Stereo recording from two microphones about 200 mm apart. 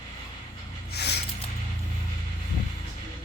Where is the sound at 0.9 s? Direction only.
55° left (ahead or behind).